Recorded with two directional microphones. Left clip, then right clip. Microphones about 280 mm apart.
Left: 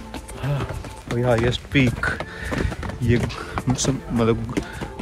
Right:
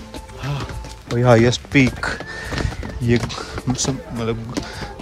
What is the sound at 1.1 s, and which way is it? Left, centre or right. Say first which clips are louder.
Speech: right 6 dB; right.